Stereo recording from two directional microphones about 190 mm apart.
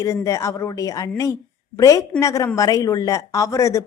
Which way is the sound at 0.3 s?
15° left (ahead or behind).